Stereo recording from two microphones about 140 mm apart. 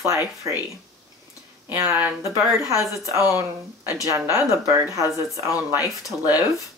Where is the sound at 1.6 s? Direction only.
15° right (ahead or behind).